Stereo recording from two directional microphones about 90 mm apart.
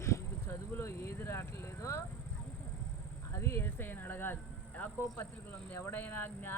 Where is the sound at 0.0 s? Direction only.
30° left (ahead or behind).